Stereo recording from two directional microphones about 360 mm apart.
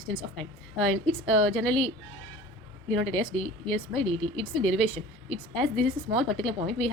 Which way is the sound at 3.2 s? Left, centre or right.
Centre.